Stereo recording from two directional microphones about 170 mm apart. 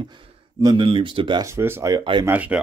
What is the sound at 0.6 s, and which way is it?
Speech, 25° right (ahead or behind).